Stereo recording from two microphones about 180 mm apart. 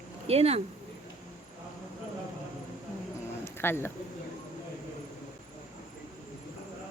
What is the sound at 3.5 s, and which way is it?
Speech, 15° left (ahead or behind).